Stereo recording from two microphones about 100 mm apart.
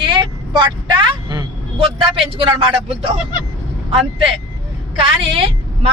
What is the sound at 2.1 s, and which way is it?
Speech, 65° right (ahead or behind).